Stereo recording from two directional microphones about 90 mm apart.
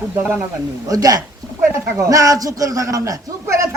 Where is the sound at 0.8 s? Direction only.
40° right (ahead or behind).